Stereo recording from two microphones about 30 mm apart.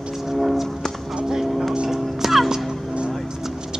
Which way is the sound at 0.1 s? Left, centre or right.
Centre.